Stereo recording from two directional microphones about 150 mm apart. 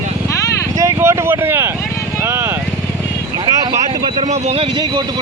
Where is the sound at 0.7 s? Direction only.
20° right (ahead or behind).